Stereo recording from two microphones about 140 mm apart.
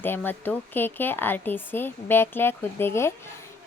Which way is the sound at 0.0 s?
15° left (ahead or behind).